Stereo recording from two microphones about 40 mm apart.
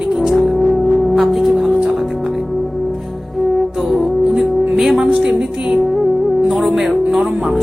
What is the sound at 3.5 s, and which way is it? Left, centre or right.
Music, centre.